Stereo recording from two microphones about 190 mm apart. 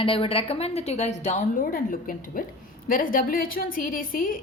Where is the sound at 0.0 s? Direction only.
30° left (ahead or behind).